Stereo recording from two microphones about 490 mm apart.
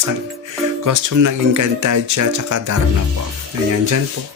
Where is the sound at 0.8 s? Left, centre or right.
Right.